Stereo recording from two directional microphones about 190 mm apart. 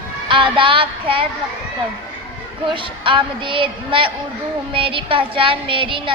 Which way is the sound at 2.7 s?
25° right (ahead or behind).